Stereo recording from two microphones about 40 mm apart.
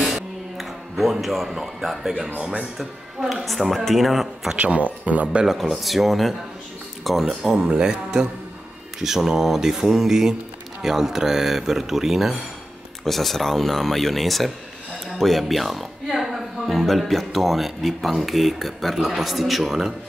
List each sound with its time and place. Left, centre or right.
0.0 s a sound: centre
3.4 s speech: centre
4.6 s speech: right
5.6 s speech: centre
7.5 s speech: right